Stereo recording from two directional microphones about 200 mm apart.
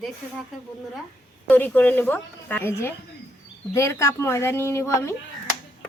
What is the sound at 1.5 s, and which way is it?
A woman's voice, 10° left (ahead or behind).